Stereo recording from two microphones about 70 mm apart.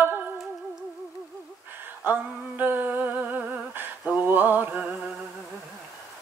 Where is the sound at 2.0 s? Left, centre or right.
Right.